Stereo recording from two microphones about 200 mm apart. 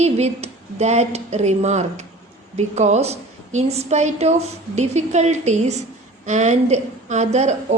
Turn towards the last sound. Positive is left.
turn(degrees=-35)  # may be behind; listen again after turning